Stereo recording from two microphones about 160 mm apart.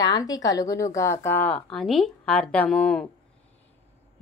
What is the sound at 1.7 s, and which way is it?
A woman's voice, centre (ahead or behind).